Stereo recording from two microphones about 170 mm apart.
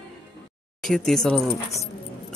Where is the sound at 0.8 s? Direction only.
5° left (ahead or behind).